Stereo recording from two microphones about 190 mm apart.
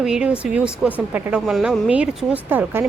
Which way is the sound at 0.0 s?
5° right (ahead or behind).